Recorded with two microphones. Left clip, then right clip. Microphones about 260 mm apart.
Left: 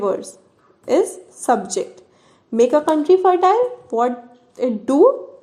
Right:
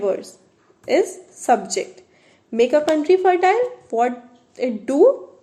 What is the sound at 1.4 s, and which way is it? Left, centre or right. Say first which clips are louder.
A woman's voice: even; left.